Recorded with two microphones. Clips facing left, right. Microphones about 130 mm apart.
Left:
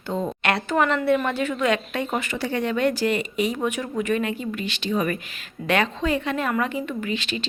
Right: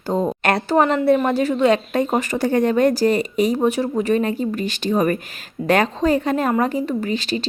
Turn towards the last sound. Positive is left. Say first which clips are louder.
# right 5 dB
turn(degrees=-40)  # may be behind; listen again after turning